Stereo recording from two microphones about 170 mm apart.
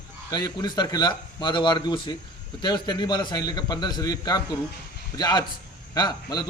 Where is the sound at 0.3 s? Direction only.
20° left (ahead or behind).